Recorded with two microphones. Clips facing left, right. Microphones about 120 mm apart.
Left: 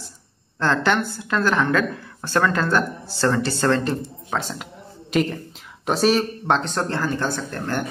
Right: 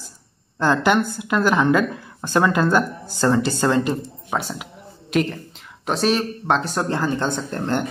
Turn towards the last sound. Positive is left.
turn(degrees=-20)  # may be behind; listen again after turning